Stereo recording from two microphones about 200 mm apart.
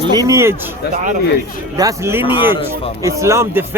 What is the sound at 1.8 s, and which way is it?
Speech, 10° right (ahead or behind).